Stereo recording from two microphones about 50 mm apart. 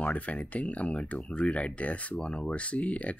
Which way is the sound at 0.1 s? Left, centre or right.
Left.